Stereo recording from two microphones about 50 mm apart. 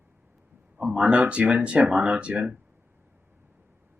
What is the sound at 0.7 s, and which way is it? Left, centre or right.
Speech, centre.